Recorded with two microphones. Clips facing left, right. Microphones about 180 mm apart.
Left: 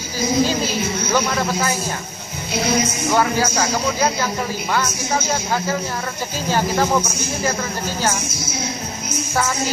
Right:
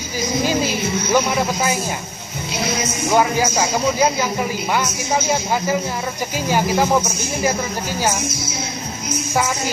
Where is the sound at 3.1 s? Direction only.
15° right (ahead or behind).